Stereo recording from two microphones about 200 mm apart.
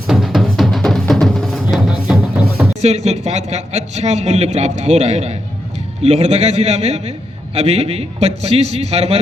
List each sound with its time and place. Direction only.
0.1 s music: centre (ahead or behind)
2.8 s a man's voice: 35° right (ahead or behind)